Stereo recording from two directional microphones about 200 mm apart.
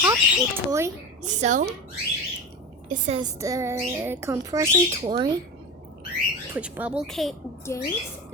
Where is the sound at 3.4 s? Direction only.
15° right (ahead or behind).